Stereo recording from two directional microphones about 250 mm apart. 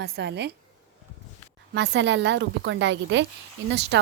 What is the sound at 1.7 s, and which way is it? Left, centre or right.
A woman's voice, right.